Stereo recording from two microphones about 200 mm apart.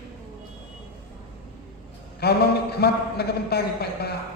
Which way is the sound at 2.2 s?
55° left (ahead or behind).